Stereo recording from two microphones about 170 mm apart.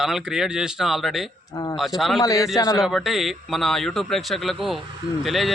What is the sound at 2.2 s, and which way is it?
Speech, 20° left (ahead or behind).